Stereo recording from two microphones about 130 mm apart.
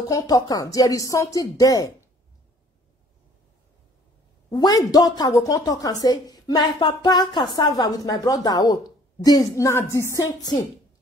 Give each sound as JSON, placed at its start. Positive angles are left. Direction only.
{"t": 0.1, "sound": "a woman's voice", "side_deg": 30}
{"t": 4.5, "sound": "a woman's voice", "side_deg": 30}